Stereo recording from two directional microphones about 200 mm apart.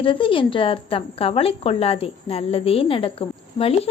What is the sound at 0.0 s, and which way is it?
Speech, 25° left (ahead or behind).